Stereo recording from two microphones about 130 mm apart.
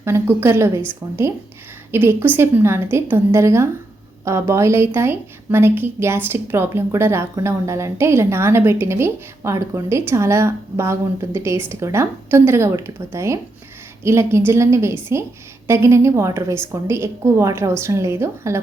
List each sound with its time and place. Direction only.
0.0 s a woman's voice: 20° right (ahead or behind)